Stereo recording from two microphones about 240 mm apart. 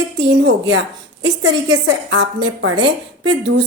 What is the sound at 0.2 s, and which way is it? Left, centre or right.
Speech, right.